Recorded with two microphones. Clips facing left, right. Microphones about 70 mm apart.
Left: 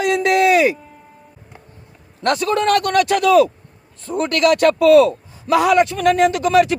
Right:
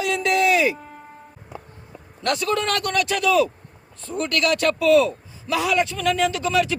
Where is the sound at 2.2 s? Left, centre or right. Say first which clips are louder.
Left 5 dB; left.